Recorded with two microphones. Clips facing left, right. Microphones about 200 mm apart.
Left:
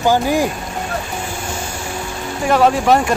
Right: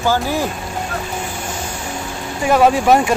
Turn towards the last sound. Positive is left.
turn(degrees=-5)  # may be behind; listen again after turning